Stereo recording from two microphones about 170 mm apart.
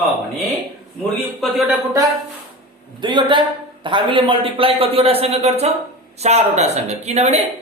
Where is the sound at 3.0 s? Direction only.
30° right (ahead or behind).